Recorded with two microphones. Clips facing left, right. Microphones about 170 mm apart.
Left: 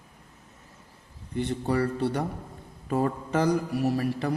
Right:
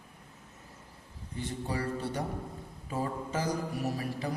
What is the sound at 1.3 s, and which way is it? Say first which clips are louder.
Speech: left 8 dB; 65° left (ahead or behind).